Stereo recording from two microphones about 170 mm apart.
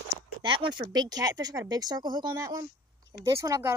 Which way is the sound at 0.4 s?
30° right (ahead or behind).